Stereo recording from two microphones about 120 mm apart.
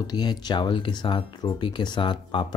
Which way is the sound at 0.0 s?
35° left (ahead or behind).